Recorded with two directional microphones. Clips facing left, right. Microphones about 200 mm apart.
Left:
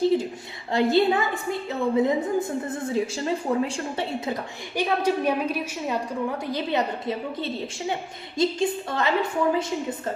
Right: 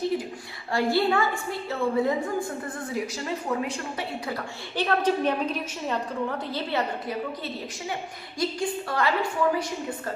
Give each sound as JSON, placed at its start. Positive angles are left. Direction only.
{"t": 0.0, "sound": "a sound", "side_deg": 30}
{"t": 0.7, "sound": "a woman's voice", "side_deg": 20}
{"t": 4.8, "sound": "a woman's voice", "side_deg": 10}